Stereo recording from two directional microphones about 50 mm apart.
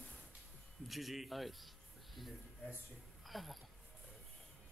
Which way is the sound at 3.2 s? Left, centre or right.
Centre.